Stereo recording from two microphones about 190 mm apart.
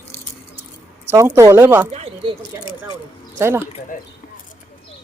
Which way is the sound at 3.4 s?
15° right (ahead or behind).